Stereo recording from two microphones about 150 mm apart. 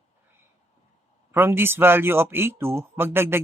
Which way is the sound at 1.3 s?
15° right (ahead or behind).